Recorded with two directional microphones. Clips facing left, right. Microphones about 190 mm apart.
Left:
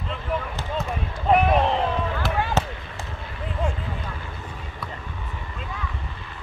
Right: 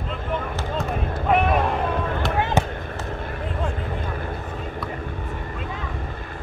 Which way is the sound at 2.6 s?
50° right (ahead or behind).